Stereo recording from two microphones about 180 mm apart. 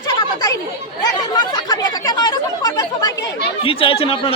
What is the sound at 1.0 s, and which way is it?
Chatter, 20° left (ahead or behind).